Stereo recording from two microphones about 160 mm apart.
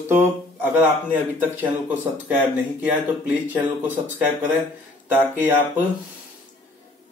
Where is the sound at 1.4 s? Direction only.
10° right (ahead or behind).